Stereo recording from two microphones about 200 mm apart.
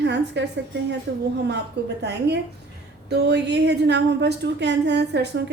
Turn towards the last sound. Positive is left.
turn(degrees=-60)  # may be behind; listen again after turning